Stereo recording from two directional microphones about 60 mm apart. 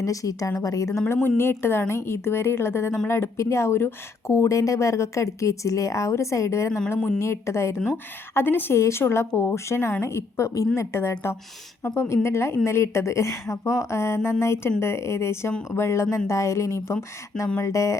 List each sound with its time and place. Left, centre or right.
0.0 s a woman's voice: left
1.0 s a woman's voice: left
8.3 s a woman's voice: left
9.6 s a woman's voice: left